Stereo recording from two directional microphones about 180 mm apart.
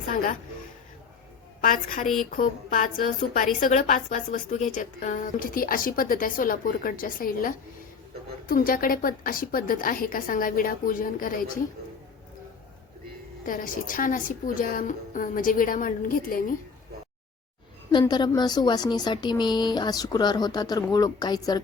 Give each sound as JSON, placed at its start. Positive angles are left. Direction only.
{"t": 1.6, "sound": "a woman's voice", "side_deg": 45}
{"t": 13.4, "sound": "a woman's voice", "side_deg": 50}
{"t": 18.0, "sound": "a woman's voice", "side_deg": 25}